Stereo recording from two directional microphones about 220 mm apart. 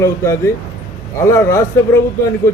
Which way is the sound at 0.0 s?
15° left (ahead or behind).